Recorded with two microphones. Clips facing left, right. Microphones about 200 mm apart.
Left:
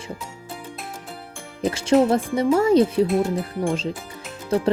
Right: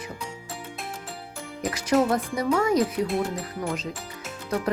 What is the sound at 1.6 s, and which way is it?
Speech, 25° left (ahead or behind).